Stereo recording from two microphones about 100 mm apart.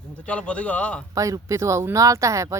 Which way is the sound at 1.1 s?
35° right (ahead or behind).